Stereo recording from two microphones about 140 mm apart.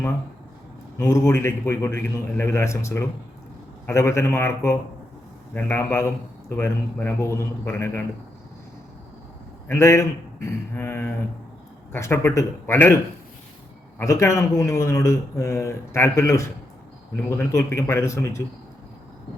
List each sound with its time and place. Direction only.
0.9 s a man's voice: 20° left (ahead or behind)
9.6 s speech: 20° left (ahead or behind)
14.0 s a man's voice: 20° left (ahead or behind)